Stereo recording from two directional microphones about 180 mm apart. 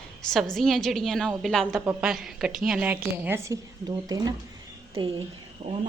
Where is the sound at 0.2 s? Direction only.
5° left (ahead or behind); by 4.4 s 20° right (ahead or behind).